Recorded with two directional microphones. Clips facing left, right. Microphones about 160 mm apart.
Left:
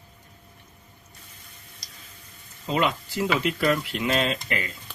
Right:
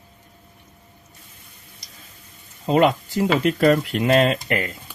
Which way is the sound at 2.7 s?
45° right (ahead or behind).